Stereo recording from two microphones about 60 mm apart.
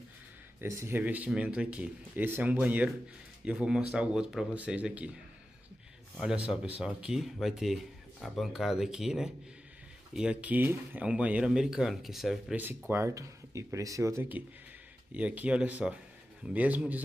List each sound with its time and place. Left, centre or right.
0.7 s speech: right
0.9 s speech: right
2.1 s speech: right
3.4 s speech: centre
4.6 s speech: centre
6.2 s speech: centre
7.2 s speech: centre; by 10.6 s right
10.6 s speech: right
11.0 s speech: right; by 12.5 s centre
12.5 s speech: right
13.1 s speech: right
15.1 s speech: right